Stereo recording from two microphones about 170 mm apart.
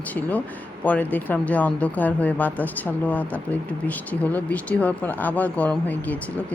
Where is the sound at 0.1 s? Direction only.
10° left (ahead or behind).